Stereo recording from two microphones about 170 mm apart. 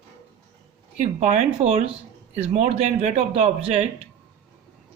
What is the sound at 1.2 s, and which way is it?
A man's voice, 40° right (ahead or behind).